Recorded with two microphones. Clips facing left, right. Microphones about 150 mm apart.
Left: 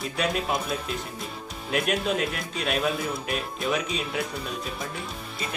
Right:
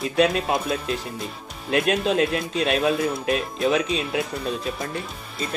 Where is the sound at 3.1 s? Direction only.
Centre (ahead or behind).